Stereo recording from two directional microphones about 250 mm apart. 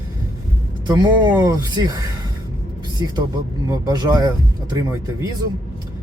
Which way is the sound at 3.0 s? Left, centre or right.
Centre.